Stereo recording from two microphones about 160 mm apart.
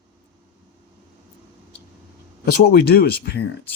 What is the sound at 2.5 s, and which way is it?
Speech, 70° left (ahead or behind).